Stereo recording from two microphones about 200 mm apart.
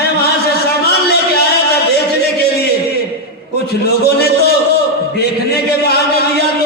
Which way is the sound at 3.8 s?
55° left (ahead or behind).